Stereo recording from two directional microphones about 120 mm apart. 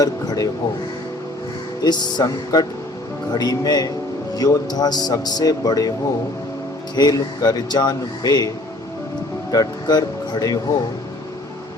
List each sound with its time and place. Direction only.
0.0 s a sound: 30° left (ahead or behind)
1.8 s speech: 35° left (ahead or behind)
6.9 s speech: 35° left (ahead or behind)